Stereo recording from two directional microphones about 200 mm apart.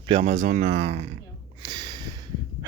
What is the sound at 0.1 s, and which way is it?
Speech, 30° right (ahead or behind).